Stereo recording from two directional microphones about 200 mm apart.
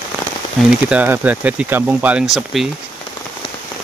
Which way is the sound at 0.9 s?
5° right (ahead or behind).